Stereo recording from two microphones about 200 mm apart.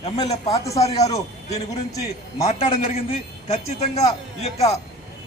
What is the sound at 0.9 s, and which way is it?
A man's voice, 30° left (ahead or behind).